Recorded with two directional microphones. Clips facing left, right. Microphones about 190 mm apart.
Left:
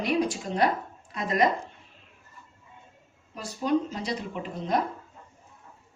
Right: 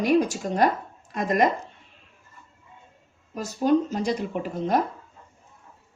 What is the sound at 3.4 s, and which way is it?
Speech, 45° right (ahead or behind).